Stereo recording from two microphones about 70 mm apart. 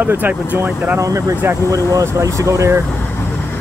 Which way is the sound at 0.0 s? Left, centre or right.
Right.